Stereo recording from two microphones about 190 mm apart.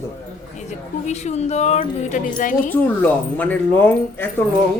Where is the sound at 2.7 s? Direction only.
10° left (ahead or behind).